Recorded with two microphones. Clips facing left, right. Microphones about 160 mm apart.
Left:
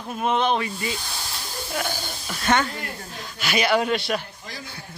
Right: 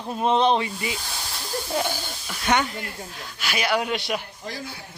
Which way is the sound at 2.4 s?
15° right (ahead or behind).